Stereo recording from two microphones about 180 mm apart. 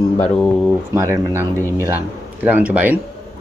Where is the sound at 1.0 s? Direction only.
15° right (ahead or behind).